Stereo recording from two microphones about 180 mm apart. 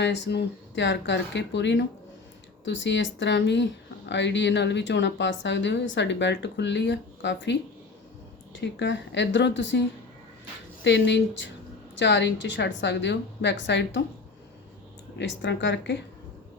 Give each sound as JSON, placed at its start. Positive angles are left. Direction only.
{"t": 0.0, "sound": "speech", "side_deg": 75}
{"t": 8.6, "sound": "speech", "side_deg": 80}
{"t": 10.8, "sound": "speech", "side_deg": 75}
{"t": 15.2, "sound": "speech", "side_deg": 75}